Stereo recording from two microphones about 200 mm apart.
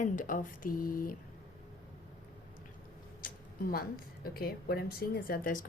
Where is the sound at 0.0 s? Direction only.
40° left (ahead or behind).